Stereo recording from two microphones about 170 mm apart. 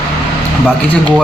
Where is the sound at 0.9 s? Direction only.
5° left (ahead or behind).